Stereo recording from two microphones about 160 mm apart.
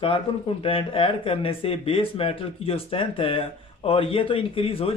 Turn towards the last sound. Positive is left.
turn(degrees=35)  # may be behind; listen again after turning